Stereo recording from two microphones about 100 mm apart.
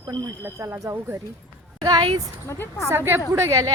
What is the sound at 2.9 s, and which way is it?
Speech, 20° right (ahead or behind).